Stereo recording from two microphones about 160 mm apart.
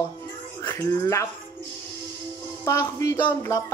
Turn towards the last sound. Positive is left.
turn(degrees=20)  # may be behind; listen again after turning